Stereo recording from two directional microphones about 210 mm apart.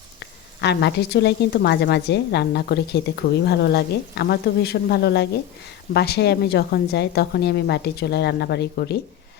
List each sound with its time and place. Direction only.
0.2 s a woman's voice: 55° left (ahead or behind)